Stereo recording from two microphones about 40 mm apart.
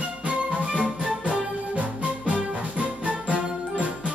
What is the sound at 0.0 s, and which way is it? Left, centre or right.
Music, right.